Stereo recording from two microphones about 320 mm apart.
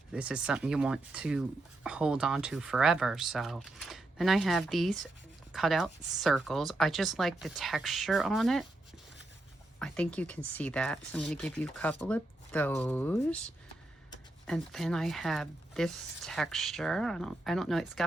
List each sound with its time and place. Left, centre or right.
0.1 s speech: centre
9.7 s speech: centre